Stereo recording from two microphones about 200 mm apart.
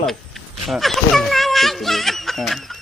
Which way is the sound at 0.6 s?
Centre (ahead or behind).